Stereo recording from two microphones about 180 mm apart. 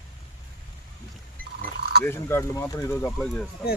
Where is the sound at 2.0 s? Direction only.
15° left (ahead or behind).